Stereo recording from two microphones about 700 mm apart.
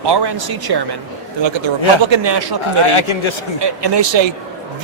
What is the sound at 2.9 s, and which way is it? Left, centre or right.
Speech, left.